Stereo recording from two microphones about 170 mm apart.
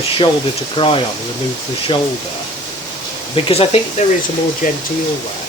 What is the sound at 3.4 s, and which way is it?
Speech, 35° left (ahead or behind).